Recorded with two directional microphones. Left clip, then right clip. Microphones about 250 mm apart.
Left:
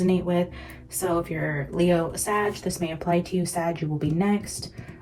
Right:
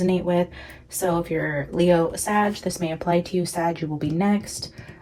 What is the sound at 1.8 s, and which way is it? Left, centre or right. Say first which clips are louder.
Speech: right 4 dB; right.